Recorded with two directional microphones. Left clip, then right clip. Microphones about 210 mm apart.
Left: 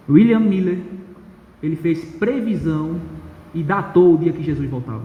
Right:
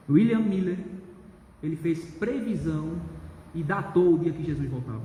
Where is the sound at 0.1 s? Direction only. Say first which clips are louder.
Left 9 dB; 45° left (ahead or behind).